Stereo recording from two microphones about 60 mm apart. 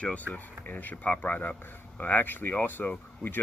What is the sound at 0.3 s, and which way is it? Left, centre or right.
Speech, left.